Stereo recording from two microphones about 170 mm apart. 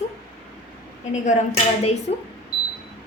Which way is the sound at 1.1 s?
40° left (ahead or behind).